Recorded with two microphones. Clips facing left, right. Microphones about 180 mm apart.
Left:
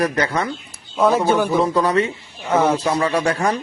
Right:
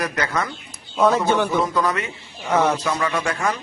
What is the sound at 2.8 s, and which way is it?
Speech, 30° left (ahead or behind).